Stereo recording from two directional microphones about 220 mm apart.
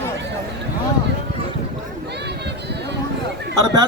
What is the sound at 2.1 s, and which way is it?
Run, 50° right (ahead or behind).